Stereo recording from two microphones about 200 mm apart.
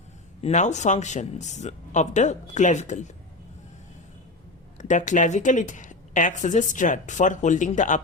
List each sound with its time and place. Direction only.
0.4 s a woman's voice: 35° left (ahead or behind)
4.8 s a woman's voice: 40° left (ahead or behind)